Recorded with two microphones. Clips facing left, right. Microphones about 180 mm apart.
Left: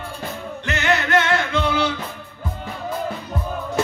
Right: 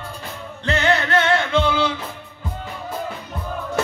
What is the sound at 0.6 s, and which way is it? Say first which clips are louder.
Music: right 2 dB; 30° right (ahead or behind).